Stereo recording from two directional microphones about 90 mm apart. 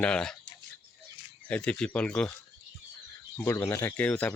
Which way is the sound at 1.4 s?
10° left (ahead or behind).